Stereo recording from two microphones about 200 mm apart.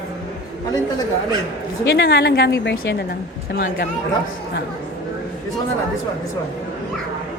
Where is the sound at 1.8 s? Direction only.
55° left (ahead or behind).